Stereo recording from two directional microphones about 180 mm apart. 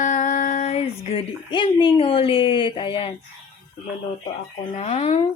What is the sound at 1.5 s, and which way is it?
Speech, 30° left (ahead or behind).